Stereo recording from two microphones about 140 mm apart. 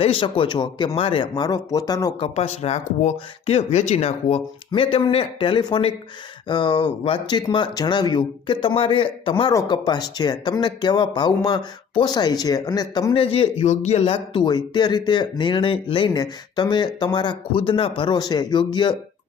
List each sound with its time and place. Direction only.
0.0 s speech: 40° left (ahead or behind)
2.1 s speech: 45° left (ahead or behind); by 13.1 s 25° left (ahead or behind)
13.1 s speech: 40° left (ahead or behind)